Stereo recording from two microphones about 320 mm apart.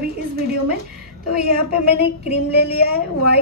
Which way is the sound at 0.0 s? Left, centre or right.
Right.